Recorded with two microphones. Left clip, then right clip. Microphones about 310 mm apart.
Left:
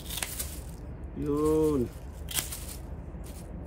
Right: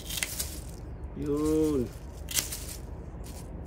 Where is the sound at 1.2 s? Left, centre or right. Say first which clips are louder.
Left 1 dB; centre.